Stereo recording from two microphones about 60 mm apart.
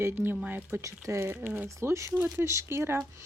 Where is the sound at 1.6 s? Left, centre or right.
Right.